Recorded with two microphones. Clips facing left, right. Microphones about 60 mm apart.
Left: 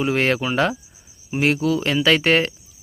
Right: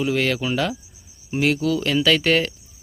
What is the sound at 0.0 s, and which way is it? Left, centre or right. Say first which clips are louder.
Speech: left 2 dB; left.